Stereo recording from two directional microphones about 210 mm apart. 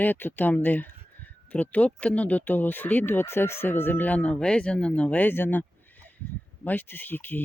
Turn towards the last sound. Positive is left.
turn(degrees=10)  # may be behind; listen again after turning